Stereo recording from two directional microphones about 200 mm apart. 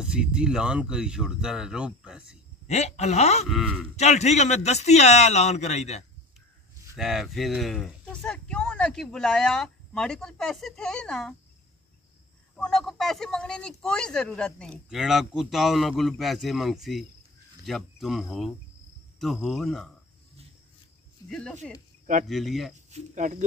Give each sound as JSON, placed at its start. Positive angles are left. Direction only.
{"t": 0.0, "sound": "a man's voice", "side_deg": -5}
{"t": 2.7, "sound": "a man's voice", "side_deg": 35}
{"t": 3.4, "sound": "a man's voice", "side_deg": 0}
{"t": 3.9, "sound": "a man's voice", "side_deg": 35}
{"t": 7.0, "sound": "a man's voice", "side_deg": 0}
{"t": 12.5, "sound": "a man's voice", "side_deg": 5}
{"t": 21.3, "sound": "a man's voice", "side_deg": 5}
{"t": 22.8, "sound": "speech", "side_deg": -35}